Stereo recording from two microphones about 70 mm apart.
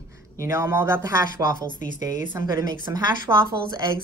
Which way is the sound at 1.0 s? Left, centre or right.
Right.